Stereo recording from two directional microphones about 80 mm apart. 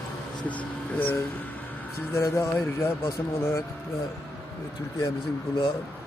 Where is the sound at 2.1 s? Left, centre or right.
Left.